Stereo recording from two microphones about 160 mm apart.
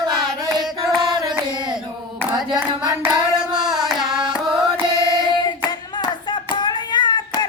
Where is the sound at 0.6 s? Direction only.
Centre (ahead or behind).